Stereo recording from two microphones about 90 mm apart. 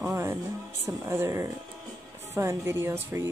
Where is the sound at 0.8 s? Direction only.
30° right (ahead or behind).